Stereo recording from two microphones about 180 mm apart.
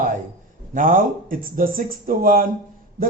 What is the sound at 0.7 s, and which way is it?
A man's voice, 45° right (ahead or behind).